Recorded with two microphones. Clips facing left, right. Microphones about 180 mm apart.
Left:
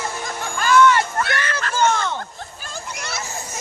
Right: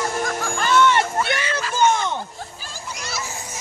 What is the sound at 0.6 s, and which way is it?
Music, 25° right (ahead or behind).